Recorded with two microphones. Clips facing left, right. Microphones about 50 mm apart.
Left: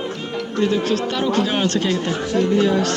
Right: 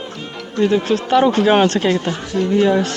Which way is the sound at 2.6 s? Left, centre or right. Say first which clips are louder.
Right 3 dB; centre.